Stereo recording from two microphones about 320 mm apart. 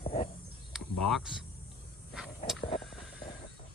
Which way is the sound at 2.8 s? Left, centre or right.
Centre.